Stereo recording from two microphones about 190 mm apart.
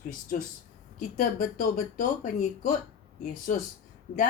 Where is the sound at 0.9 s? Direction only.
45° left (ahead or behind).